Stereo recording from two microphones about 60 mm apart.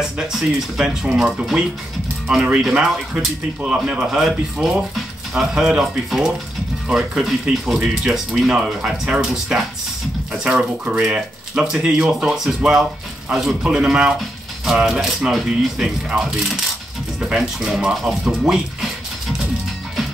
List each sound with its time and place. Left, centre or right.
0.2 s speech: centre
3.6 s speech: centre
13.6 s speech: centre